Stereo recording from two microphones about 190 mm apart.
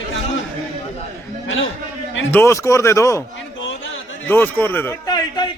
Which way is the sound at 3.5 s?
85° left.